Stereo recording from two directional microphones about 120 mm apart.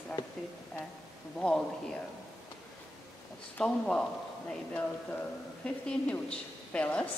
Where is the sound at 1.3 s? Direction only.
5° left (ahead or behind).